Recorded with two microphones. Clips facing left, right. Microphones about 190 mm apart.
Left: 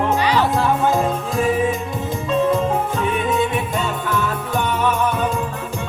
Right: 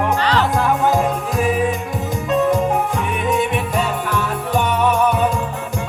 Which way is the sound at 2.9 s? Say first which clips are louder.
Even; 15° right (ahead or behind).